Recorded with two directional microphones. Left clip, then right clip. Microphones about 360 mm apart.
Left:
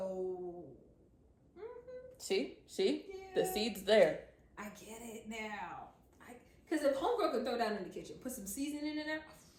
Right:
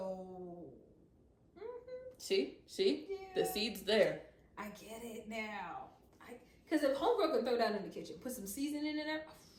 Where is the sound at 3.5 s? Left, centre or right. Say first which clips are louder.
Left 4 dB; centre.